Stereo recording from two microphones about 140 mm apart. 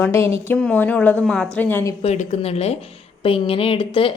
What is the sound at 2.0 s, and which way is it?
A woman's voice, 55° left (ahead or behind).